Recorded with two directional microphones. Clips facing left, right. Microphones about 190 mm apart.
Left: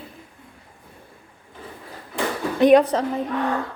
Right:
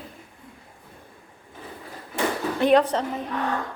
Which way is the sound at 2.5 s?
15° left (ahead or behind).